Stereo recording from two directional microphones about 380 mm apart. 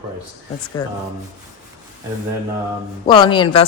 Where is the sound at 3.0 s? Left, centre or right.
Centre.